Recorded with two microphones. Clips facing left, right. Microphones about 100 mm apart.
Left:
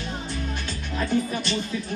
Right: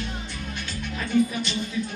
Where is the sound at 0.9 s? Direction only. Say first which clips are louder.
Right 2 dB; 35° left (ahead or behind).